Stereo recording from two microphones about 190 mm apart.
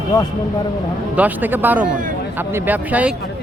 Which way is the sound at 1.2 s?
10° right (ahead or behind).